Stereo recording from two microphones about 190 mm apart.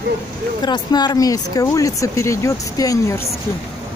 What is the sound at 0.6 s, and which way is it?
Speech, 20° left (ahead or behind).